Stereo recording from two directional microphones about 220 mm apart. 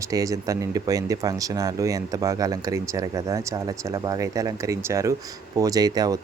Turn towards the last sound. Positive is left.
turn(degrees=-15)  # may be behind; listen again after turning